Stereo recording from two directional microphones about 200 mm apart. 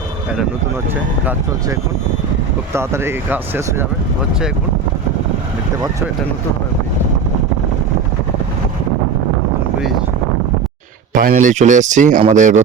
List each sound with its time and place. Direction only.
1.2 s speech: 10° right (ahead or behind)
11.1 s speech: 40° right (ahead or behind)